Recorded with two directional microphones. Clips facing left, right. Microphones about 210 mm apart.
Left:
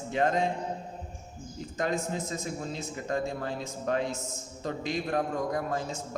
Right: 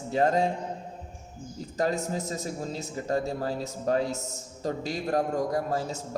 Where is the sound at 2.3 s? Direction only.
35° right (ahead or behind).